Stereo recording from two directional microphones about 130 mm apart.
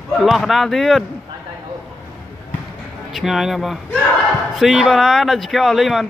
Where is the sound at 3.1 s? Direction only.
Centre (ahead or behind).